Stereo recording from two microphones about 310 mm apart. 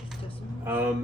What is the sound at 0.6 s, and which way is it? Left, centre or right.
Speech, centre.